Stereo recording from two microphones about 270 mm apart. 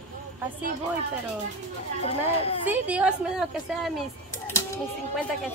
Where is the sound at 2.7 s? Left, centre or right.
Centre.